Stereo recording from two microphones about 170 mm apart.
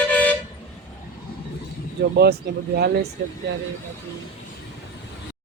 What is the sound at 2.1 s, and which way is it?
Speech, 70° right (ahead or behind).